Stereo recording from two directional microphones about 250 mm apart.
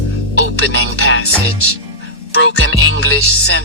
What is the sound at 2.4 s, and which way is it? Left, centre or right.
Speech, left.